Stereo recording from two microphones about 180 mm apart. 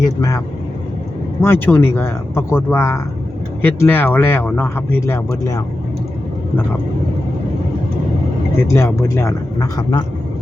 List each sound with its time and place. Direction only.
0.0 s speech: 20° left (ahead or behind)
8.7 s speech: 15° left (ahead or behind)